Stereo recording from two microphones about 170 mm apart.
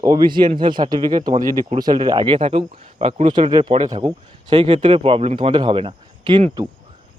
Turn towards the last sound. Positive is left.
turn(degrees=-25)  # may be behind; listen again after turning